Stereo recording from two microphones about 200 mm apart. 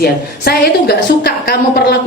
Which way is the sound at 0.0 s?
50° left (ahead or behind).